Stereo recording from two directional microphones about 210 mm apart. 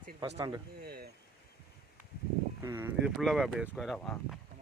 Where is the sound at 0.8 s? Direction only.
50° right (ahead or behind).